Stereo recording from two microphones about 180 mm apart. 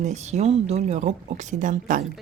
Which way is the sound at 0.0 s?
40° right (ahead or behind).